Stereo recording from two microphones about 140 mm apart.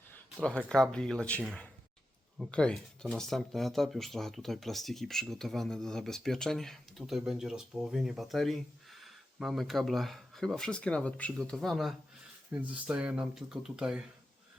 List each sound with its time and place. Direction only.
0.4 s speech: 5° left (ahead or behind)